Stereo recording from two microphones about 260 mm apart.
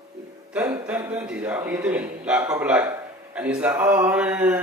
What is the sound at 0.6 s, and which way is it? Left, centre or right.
A man's voice, centre.